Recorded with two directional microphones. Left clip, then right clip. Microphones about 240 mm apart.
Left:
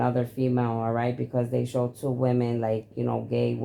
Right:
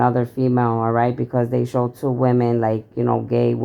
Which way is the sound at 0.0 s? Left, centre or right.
Right.